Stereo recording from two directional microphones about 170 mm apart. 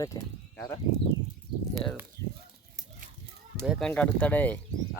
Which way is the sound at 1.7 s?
5° left (ahead or behind).